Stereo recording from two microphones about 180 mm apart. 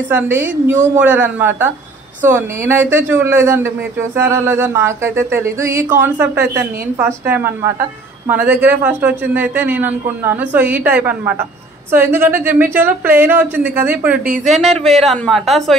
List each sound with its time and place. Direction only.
0.1 s a man's voice: 10° right (ahead or behind)
14.2 s speech: 50° right (ahead or behind)
14.5 s speech: centre (ahead or behind)